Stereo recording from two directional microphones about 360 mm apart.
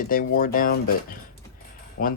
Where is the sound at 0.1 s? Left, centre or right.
Left.